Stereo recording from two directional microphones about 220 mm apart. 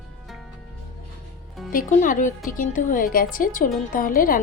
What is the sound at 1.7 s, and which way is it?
A woman's voice, 35° left (ahead or behind).